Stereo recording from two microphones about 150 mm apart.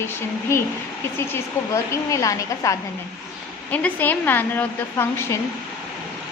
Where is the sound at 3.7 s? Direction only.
10° left (ahead or behind).